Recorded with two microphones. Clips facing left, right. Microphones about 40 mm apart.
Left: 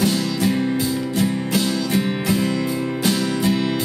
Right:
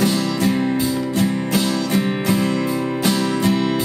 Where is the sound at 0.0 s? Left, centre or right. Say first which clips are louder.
Right 1 dB; centre.